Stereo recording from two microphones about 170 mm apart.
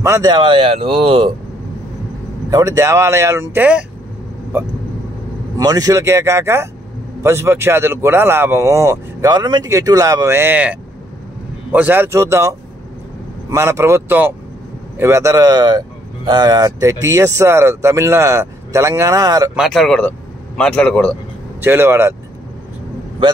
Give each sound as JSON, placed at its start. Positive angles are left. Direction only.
{"t": 0.0, "sound": "speech", "side_deg": -20}
{"t": 2.5, "sound": "speech", "side_deg": -20}
{"t": 5.6, "sound": "speech", "side_deg": -20}
{"t": 19.5, "sound": "speech", "side_deg": 0}
{"t": 21.5, "sound": "speech", "side_deg": -15}